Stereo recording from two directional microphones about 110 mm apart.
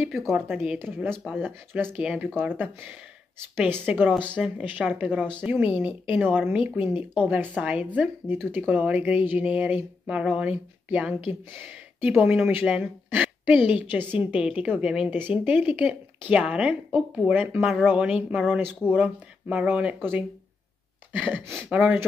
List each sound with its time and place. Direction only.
0.7 s speech: 20° right (ahead or behind)
4.1 s speech: 10° left (ahead or behind)
4.4 s speech: 10° right (ahead or behind)
21.1 s a sound: 10° right (ahead or behind)
21.5 s speech: 20° right (ahead or behind)